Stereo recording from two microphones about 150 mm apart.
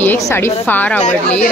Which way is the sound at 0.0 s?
15° left (ahead or behind).